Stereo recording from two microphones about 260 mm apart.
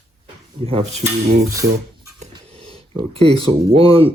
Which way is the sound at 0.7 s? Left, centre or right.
Right.